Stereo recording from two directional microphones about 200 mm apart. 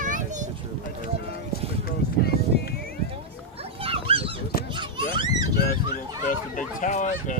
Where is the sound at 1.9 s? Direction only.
50° left (ahead or behind).